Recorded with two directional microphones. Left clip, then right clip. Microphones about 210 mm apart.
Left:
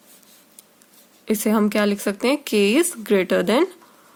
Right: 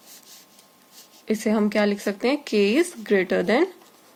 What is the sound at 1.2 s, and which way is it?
Speech, 60° left (ahead or behind).